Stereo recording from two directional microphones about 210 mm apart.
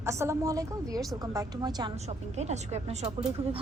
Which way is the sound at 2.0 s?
30° right (ahead or behind).